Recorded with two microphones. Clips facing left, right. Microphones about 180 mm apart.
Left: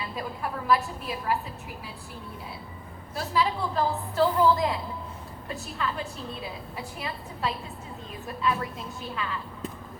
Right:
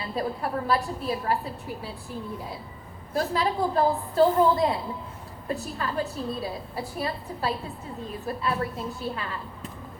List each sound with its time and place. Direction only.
0.2 s a woman's voice: 35° right (ahead or behind)
3.2 s a woman's voice: 45° right (ahead or behind)